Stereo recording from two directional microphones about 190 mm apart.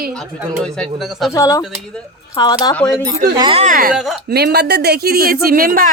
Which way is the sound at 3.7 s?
50° right (ahead or behind).